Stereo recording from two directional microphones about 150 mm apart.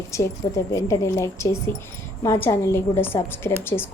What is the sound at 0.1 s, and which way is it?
A woman's voice, 20° left (ahead or behind).